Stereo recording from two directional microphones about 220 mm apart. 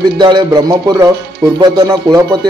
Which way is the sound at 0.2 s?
20° right (ahead or behind).